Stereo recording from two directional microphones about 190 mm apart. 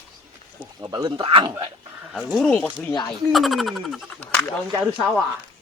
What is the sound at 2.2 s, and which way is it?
Speech, centre (ahead or behind).